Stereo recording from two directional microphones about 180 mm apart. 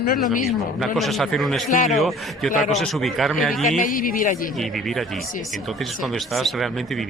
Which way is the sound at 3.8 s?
50° left (ahead or behind).